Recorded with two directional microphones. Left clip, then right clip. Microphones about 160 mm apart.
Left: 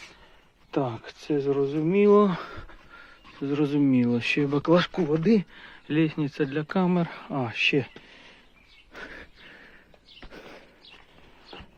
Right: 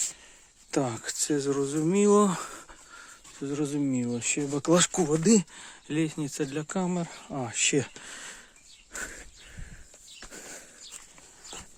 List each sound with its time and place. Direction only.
0.7 s speech: 50° right (ahead or behind); by 2.7 s 30° right (ahead or behind)
3.4 s speech: 15° right (ahead or behind)
4.6 s speech: 40° right (ahead or behind)
5.9 s speech: 20° right (ahead or behind)
10.3 s a sound: 40° right (ahead or behind)